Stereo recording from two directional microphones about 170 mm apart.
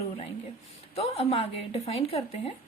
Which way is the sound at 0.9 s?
35° left (ahead or behind).